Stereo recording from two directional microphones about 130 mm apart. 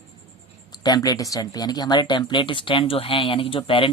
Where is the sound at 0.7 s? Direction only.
30° left (ahead or behind).